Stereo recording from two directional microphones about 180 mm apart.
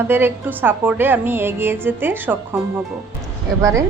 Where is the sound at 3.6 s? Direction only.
15° right (ahead or behind).